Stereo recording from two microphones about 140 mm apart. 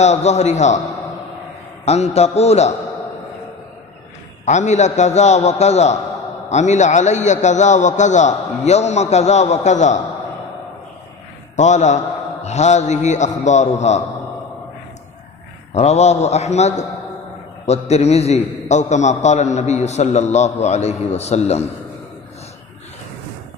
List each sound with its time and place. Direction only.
0.0 s a man's voice: 55° left (ahead or behind)
1.9 s a man's voice: 50° left (ahead or behind)
4.5 s a man's voice: 55° left (ahead or behind)
11.5 s a man's voice: 55° left (ahead or behind)
15.7 s a man's voice: 50° left (ahead or behind)